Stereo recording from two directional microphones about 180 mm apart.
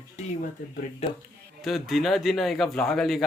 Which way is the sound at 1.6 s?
Centre (ahead or behind).